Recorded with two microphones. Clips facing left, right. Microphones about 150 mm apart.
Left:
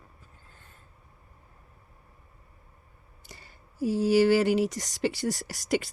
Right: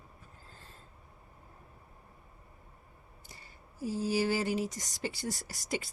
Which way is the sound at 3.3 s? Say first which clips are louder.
Left 5 dB; 80° left.